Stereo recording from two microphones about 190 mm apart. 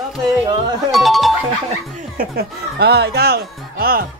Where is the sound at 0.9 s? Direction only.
Centre (ahead or behind).